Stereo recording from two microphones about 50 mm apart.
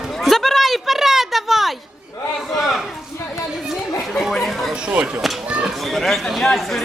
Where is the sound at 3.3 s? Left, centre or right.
Centre.